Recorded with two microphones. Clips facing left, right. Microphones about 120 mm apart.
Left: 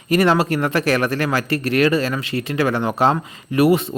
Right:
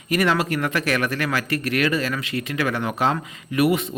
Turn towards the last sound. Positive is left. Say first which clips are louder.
# left 4 dB
turn(degrees=30)  # may be behind; listen again after turning